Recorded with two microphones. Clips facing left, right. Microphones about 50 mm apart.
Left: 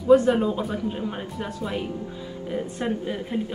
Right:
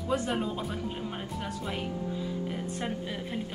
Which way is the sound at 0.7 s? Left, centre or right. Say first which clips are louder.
Left 7 dB; centre.